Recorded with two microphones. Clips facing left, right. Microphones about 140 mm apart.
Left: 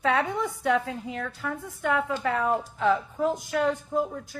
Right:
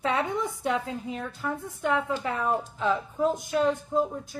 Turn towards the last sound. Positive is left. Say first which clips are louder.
# right 1 dB
turn(degrees=-20)  # may be behind; listen again after turning